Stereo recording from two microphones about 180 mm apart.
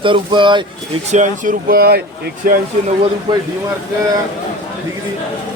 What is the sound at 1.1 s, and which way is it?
Speech, 45° right (ahead or behind).